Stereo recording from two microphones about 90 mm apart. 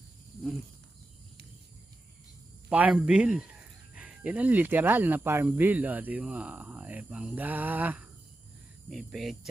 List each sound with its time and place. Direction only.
2.6 s speech: 15° right (ahead or behind)
8.9 s speech: 5° right (ahead or behind)